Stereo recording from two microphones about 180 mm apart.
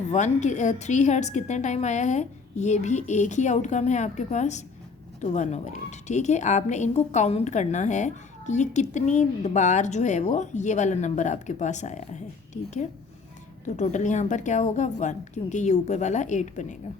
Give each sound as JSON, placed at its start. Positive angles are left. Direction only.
{"t": 0.1, "sound": "a woman's voice", "side_deg": 40}
{"t": 13.7, "sound": "a woman's voice", "side_deg": 40}